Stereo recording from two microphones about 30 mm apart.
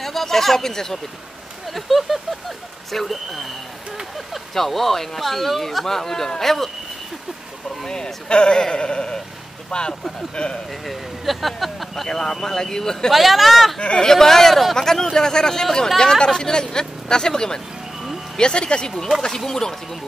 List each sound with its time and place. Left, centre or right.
0.0 s speech: centre
1.7 s speech: centre
4.6 s speech: centre
7.8 s speech: left
10.9 s speech: centre
12.1 s speech: centre
13.1 s speech: centre
13.9 s speech: centre
14.8 s speech: centre; by 18.9 s left
19.3 s speech: centre